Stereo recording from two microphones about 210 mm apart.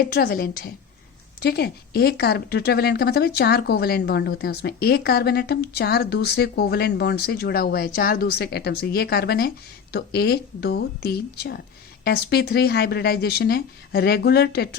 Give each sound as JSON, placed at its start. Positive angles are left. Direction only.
{"t": 0.0, "sound": "speech", "side_deg": 45}